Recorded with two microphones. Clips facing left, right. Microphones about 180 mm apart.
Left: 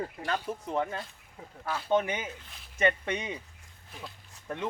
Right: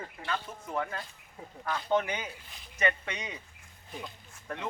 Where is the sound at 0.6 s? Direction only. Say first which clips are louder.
Left 2 dB; 25° left (ahead or behind).